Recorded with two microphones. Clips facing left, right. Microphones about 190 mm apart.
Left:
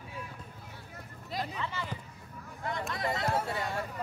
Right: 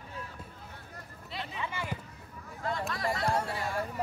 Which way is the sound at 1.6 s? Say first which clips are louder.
Right 1 dB; 10° right (ahead or behind).